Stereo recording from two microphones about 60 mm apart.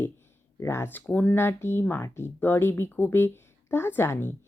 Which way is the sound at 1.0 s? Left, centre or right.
Left.